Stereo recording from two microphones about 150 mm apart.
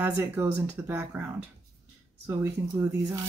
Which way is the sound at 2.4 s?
20° right (ahead or behind).